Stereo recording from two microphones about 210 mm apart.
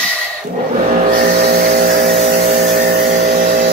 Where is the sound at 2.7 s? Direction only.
50° right (ahead or behind).